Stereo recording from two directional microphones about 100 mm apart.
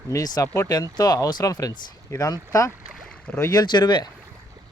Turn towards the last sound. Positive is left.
turn(degrees=50)  # may be behind; listen again after turning